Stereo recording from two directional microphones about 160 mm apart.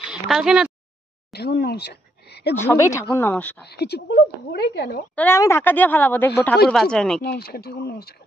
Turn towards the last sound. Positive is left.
turn(degrees=70)  # may be behind; listen again after turning